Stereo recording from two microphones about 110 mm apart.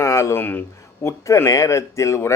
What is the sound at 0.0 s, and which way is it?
Speech, 25° left (ahead or behind).